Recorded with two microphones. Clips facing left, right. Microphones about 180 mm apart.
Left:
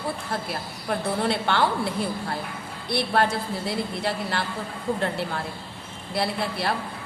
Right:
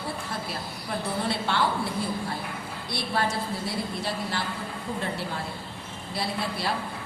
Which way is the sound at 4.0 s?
65° left (ahead or behind).